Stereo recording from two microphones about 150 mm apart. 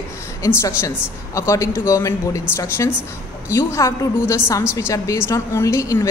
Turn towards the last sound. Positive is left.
turn(degrees=20)  # may be behind; listen again after turning